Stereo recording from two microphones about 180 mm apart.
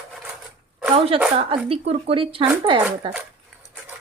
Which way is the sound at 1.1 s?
30° right (ahead or behind).